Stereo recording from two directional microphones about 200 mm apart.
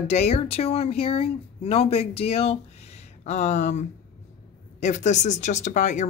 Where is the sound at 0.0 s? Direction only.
35° left (ahead or behind).